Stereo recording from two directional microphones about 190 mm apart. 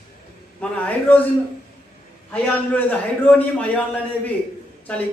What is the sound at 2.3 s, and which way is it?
A man's voice, 10° left (ahead or behind).